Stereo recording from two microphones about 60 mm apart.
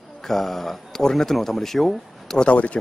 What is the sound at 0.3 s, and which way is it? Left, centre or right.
Speech, centre.